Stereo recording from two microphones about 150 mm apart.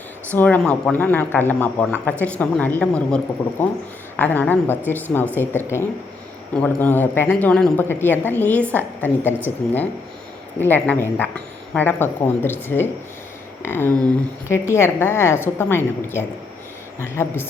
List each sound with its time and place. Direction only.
0.3 s a woman's voice: 10° left (ahead or behind)
4.2 s a woman's voice: 10° left (ahead or behind)
10.8 s a woman's voice: 10° left (ahead or behind)